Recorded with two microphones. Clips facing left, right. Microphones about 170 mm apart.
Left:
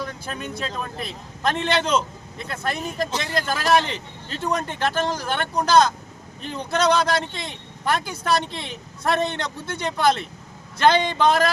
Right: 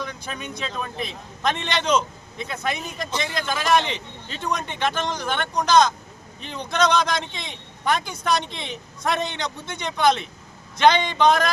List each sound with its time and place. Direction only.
0.0 s speech: centre (ahead or behind)